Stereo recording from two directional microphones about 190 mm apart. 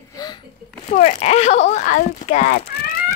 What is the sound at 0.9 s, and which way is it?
Speech, 35° left (ahead or behind).